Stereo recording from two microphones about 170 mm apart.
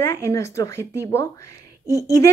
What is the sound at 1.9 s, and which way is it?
Speech, 20° right (ahead or behind).